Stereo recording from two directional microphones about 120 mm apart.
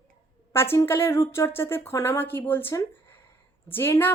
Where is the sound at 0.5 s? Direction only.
20° left (ahead or behind).